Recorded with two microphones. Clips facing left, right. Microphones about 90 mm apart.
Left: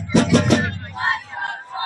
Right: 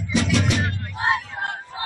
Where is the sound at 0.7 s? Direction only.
35° left (ahead or behind).